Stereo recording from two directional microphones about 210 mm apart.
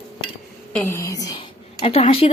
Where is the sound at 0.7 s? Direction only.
10° left (ahead or behind).